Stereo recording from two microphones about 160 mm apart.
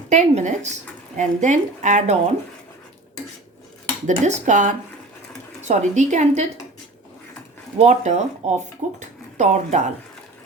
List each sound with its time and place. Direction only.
0.1 s speech: 50° right (ahead or behind)
4.0 s speech: 50° right (ahead or behind)
7.8 s speech: 45° right (ahead or behind)